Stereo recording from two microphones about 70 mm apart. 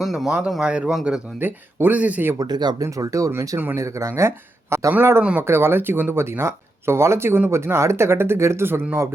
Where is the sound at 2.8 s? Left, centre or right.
Right.